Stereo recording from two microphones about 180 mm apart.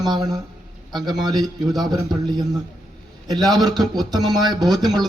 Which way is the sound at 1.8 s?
20° right (ahead or behind).